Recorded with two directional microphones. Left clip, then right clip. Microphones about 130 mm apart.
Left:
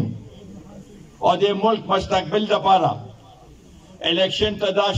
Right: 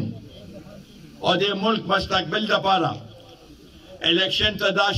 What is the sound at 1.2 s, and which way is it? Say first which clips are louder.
A man's voice: left 4 dB; 25° left (ahead or behind).